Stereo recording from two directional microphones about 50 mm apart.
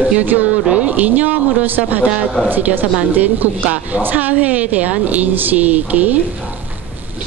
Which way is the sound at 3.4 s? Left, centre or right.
Right.